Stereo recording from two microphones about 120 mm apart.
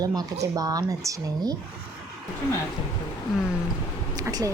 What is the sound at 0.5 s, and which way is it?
Speech, 30° right (ahead or behind).